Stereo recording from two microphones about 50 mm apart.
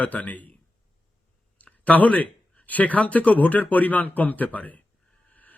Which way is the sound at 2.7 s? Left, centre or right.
Left.